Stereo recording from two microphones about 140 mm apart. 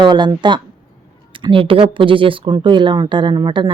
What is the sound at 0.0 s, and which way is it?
Speech, 30° right (ahead or behind).